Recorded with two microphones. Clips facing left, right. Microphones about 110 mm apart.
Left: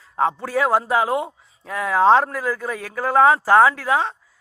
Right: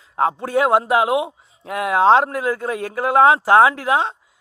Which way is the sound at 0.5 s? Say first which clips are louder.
Right 3 dB; 25° right (ahead or behind).